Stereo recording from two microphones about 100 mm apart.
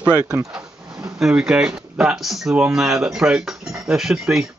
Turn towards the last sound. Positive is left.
turn(degrees=-5)  # may be behind; listen again after turning